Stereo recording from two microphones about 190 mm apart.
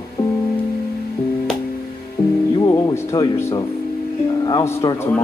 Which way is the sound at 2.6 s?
15° left (ahead or behind).